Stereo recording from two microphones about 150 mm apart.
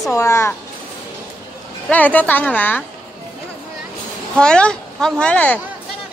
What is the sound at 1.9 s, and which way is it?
Speech, 10° left (ahead or behind).